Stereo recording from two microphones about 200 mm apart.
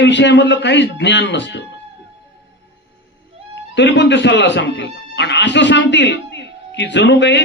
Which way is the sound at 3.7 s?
60° left (ahead or behind).